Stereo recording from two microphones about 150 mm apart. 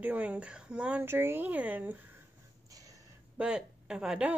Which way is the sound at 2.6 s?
25° right (ahead or behind).